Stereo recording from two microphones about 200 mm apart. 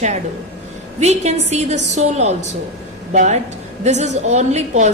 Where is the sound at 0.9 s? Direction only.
35° right (ahead or behind).